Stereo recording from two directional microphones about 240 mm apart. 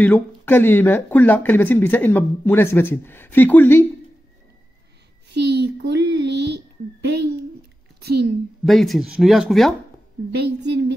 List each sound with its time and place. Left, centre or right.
0.0 s speech: centre
5.3 s a child's voice: right
8.0 s a child's voice: right
8.6 s speech: centre
10.3 s a child's voice: right